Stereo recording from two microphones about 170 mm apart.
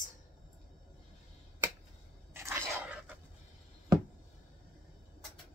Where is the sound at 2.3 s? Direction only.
15° right (ahead or behind).